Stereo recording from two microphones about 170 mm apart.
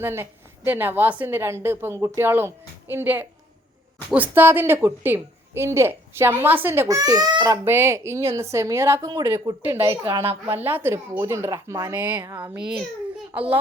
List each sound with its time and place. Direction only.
0.0 s a woman's voice: 15° right (ahead or behind)